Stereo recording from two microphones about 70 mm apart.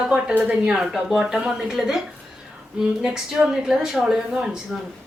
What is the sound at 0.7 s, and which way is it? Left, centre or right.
A woman's voice, centre.